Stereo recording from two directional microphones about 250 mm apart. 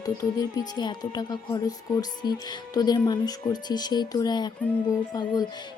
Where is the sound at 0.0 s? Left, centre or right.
Centre.